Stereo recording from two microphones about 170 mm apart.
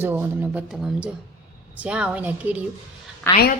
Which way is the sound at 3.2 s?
10° left (ahead or behind).